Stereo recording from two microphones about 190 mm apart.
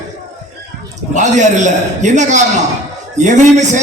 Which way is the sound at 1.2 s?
40° right (ahead or behind).